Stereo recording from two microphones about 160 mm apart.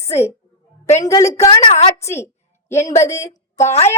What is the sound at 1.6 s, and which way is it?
Speech, 35° left (ahead or behind).